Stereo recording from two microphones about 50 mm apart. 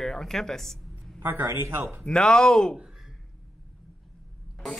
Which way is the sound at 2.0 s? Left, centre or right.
Centre.